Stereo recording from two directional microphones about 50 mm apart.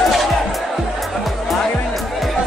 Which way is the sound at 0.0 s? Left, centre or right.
Centre.